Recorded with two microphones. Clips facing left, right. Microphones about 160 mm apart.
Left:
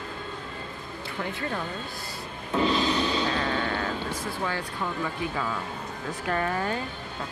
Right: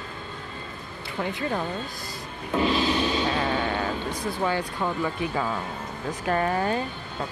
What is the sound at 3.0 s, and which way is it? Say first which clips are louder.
Vehicle: right 2 dB; 10° right (ahead or behind).